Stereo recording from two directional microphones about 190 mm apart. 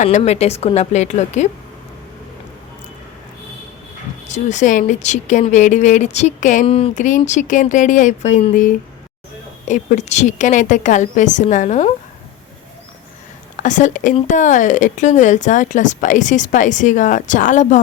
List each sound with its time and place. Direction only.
0.0 s speech: 35° left (ahead or behind)
4.3 s speech: 40° left (ahead or behind)
13.6 s speech: 40° left (ahead or behind)